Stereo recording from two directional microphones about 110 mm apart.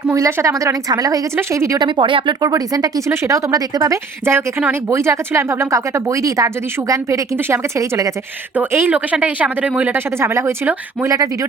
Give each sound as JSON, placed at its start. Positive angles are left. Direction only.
{"t": 0.1, "sound": "speech", "side_deg": -25}
{"t": 1.8, "sound": "speech", "side_deg": -50}
{"t": 2.4, "sound": "speech", "side_deg": -35}
{"t": 4.3, "sound": "speech", "side_deg": -20}
{"t": 8.5, "sound": "speech", "side_deg": -15}